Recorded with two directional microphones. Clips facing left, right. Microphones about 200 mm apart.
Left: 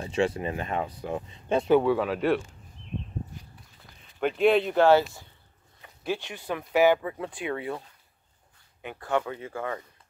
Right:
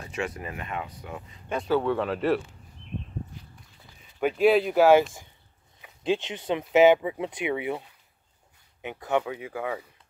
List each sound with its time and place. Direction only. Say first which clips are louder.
0.0 s speech: left 6 dB; 30° left (ahead or behind)
1.8 s speech: left 2 dB; 5° left (ahead or behind)
4.2 s speech: right 1 dB; 5° right (ahead or behind)
5.8 s speech: right 5 dB; 20° right (ahead or behind)
9.2 s speech: right 1 dB; 10° right (ahead or behind)